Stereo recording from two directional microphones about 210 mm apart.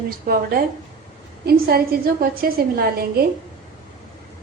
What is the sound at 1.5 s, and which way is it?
A woman's voice, 45° right (ahead or behind).